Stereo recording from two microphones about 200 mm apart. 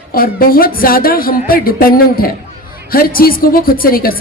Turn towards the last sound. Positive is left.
turn(degrees=45)  # may be behind; listen again after turning